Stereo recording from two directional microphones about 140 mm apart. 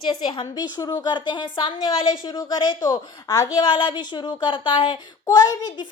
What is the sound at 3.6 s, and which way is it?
A woman's voice, 40° left (ahead or behind).